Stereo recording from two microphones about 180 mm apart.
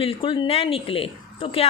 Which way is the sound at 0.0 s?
30° left (ahead or behind).